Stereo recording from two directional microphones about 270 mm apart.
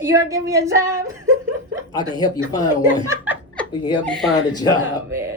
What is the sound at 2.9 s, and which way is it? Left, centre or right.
A woman's voice, centre.